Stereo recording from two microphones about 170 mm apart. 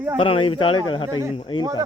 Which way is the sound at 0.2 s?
30° left (ahead or behind).